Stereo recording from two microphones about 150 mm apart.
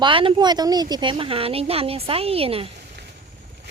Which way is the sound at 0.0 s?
35° right (ahead or behind).